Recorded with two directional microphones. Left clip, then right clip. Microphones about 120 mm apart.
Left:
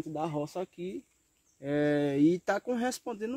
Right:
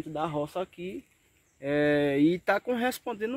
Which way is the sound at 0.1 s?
Centre (ahead or behind).